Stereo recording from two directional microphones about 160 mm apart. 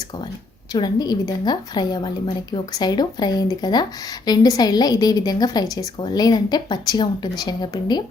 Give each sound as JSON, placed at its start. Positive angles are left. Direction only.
{"t": 0.7, "sound": "a woman's voice", "side_deg": 25}